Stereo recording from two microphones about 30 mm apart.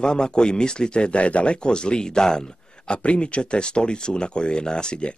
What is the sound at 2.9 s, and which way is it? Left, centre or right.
Speech, left.